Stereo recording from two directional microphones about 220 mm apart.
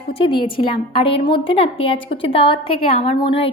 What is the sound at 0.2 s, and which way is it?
A woman's voice, 25° left (ahead or behind).